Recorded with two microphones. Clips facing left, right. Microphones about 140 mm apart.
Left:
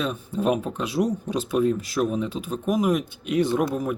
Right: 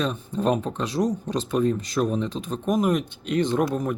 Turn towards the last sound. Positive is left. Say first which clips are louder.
# even
turn(degrees=5)  # may be behind; listen again after turning